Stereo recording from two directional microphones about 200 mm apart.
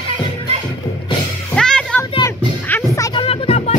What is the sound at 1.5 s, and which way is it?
Music, 5° left (ahead or behind).